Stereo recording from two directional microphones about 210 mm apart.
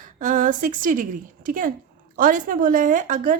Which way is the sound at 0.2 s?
40° right (ahead or behind).